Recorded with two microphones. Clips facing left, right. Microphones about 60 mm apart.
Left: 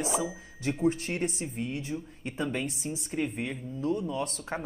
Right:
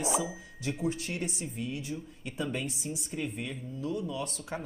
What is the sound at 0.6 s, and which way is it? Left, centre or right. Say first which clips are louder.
A woman's voice: left 5 dB; left.